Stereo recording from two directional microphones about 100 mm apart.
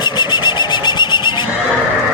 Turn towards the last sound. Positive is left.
turn(degrees=50)  # may be behind; listen again after turning